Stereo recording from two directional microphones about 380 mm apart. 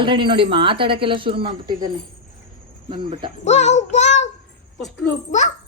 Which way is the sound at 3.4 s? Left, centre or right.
Centre.